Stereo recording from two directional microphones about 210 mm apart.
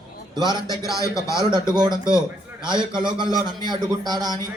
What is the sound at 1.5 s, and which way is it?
A man's voice, 20° right (ahead or behind).